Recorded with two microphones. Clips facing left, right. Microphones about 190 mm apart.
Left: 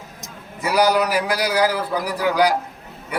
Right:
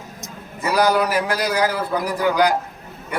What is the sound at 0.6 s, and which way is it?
A man's voice, 10° left (ahead or behind).